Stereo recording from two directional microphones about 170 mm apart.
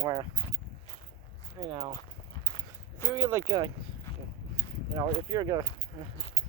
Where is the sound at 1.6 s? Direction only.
30° right (ahead or behind).